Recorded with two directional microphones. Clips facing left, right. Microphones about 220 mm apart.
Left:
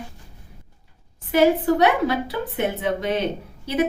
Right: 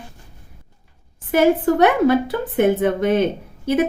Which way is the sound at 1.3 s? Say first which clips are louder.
Right 2 dB; 50° right (ahead or behind).